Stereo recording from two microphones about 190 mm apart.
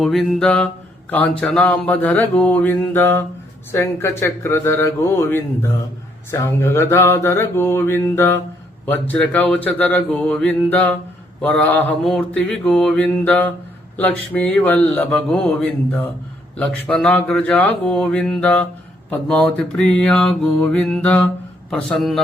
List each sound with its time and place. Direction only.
0.0 s mantra: centre (ahead or behind)